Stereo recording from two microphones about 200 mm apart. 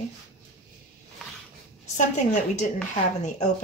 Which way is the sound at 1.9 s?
40° left (ahead or behind).